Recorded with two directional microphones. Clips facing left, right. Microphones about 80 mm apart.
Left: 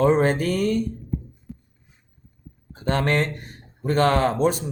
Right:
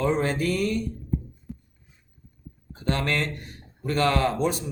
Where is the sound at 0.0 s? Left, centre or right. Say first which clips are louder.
Left 5 dB; left.